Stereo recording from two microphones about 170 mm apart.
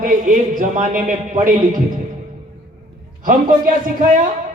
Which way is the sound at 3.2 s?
50° right (ahead or behind).